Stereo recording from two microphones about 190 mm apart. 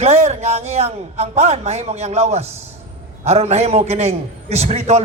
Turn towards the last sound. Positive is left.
turn(degrees=-35)  # may be behind; listen again after turning